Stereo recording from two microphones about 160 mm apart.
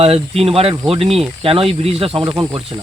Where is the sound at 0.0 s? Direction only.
35° right (ahead or behind).